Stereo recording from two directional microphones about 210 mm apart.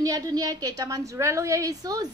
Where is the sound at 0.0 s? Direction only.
15° right (ahead or behind).